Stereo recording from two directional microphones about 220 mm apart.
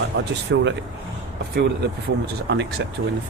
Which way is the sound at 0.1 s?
60° right (ahead or behind).